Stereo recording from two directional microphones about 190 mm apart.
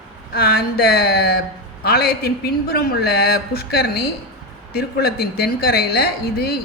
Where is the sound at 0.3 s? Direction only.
55° left (ahead or behind).